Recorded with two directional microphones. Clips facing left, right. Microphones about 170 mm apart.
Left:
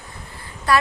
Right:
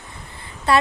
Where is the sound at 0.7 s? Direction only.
25° right (ahead or behind).